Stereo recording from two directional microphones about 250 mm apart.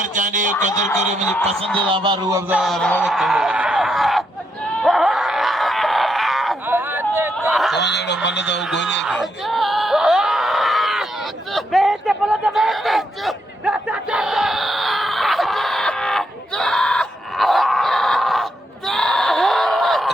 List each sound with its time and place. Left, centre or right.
0.0 s speech: right
1.9 s speech: centre
2.5 s speech: centre
4.8 s groan: centre
7.3 s a sound: centre
7.8 s speech: left
9.0 s screaming: centre
11.5 s a sound: centre